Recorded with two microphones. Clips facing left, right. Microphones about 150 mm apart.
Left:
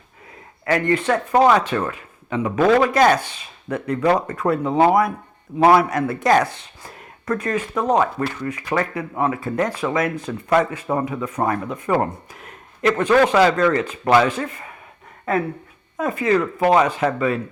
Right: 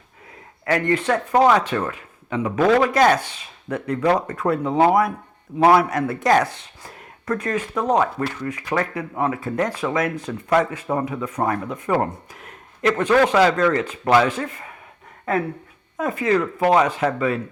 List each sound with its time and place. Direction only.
0.6 s speech: 10° left (ahead or behind)
1.3 s speech: 25° left (ahead or behind)
1.5 s speech: 10° left (ahead or behind)
2.6 s speech: 55° left (ahead or behind)
3.2 s speech: 10° left (ahead or behind)
12.3 s a sound: 10° left (ahead or behind)
13.2 s speech: 10° left (ahead or behind)